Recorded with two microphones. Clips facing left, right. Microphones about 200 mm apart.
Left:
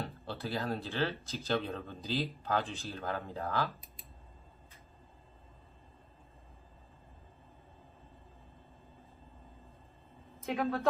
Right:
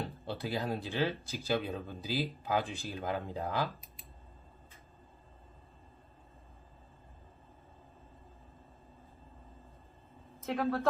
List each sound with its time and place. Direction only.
0.0 s speech: 15° right (ahead or behind)
10.4 s speech: centre (ahead or behind)